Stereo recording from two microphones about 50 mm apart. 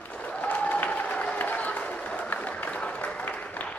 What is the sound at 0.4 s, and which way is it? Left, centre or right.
Applause, left.